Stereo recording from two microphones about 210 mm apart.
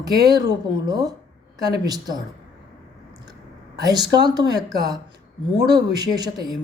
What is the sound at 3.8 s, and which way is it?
Speech, 20° right (ahead or behind).